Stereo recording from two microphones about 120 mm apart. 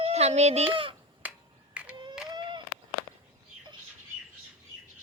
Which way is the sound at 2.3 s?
40° right (ahead or behind).